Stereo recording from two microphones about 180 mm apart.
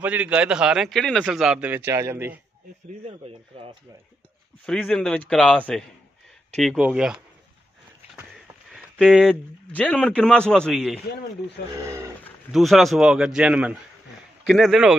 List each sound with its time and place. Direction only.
0.0 s a man's voice: 10° right (ahead or behind)
3.1 s speech: 30° right (ahead or behind)
4.6 s a man's voice: 5° left (ahead or behind)
8.7 s a sound: centre (ahead or behind)
9.7 s a man's voice: 10° left (ahead or behind)
11.7 s speech: 15° right (ahead or behind)
12.4 s a man's voice: centre (ahead or behind)